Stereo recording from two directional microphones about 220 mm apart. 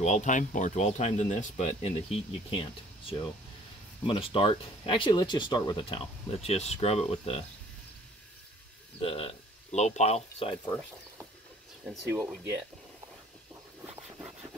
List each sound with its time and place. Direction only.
0.0 s speech: 35° left (ahead or behind)
9.0 s speech: 25° left (ahead or behind)
11.8 s speech: 5° right (ahead or behind)